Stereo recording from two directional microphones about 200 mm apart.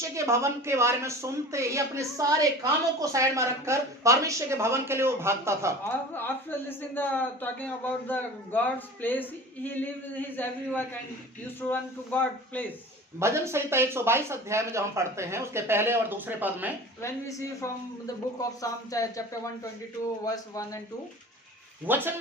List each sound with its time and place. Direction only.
0.1 s speech: 15° right (ahead or behind)
5.8 s a woman's voice: 10° left (ahead or behind)
13.1 s speech: 15° right (ahead or behind)
17.0 s a woman's voice: 15° left (ahead or behind)
21.8 s speech: 10° right (ahead or behind)